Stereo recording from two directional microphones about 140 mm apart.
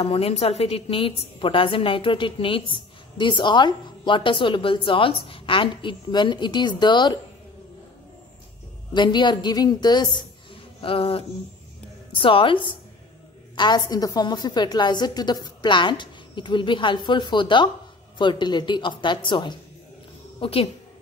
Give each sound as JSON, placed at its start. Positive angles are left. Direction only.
{"t": 0.0, "sound": "a woman's voice", "side_deg": 45}
{"t": 8.9, "sound": "a woman's voice", "side_deg": 35}
{"t": 10.5, "sound": "a sound", "side_deg": 40}
{"t": 12.2, "sound": "a woman's voice", "side_deg": 40}